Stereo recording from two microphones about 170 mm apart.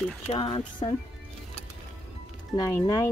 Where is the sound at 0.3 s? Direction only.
30° left (ahead or behind).